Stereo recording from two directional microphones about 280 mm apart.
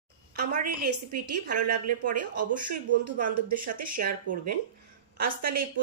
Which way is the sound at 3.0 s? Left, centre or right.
Right.